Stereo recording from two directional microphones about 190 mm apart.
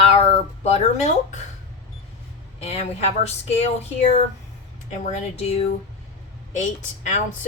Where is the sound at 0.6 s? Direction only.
35° left (ahead or behind).